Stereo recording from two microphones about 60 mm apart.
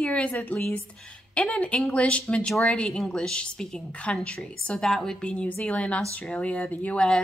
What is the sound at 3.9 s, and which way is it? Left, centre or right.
Speech, left.